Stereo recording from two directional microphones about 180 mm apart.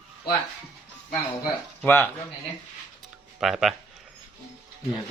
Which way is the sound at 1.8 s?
15° left (ahead or behind).